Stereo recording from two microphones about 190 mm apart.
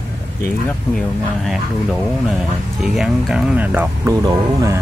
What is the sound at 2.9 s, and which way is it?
Speech, 5° right (ahead or behind).